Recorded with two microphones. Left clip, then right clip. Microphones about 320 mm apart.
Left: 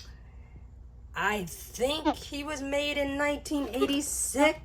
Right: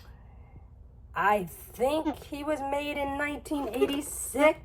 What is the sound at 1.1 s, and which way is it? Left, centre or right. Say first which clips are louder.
Speech: right 4 dB; centre.